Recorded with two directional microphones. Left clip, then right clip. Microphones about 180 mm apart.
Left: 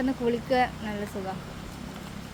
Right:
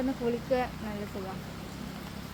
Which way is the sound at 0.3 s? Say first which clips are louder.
Left 6 dB; 60° left (ahead or behind).